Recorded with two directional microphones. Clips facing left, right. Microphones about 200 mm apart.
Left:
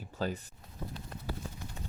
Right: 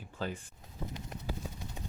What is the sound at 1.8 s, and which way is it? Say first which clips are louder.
Vehicle: right 1 dB; 15° right (ahead or behind).